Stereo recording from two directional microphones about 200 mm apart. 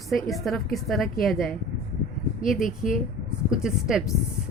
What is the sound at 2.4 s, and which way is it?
Speech, 40° left (ahead or behind).